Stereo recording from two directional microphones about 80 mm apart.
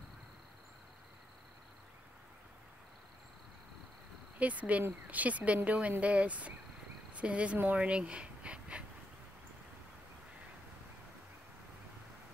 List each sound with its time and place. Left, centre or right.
4.4 s speech: centre